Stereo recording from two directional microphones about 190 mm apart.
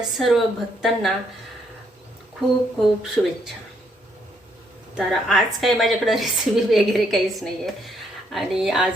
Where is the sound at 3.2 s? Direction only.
5° left (ahead or behind).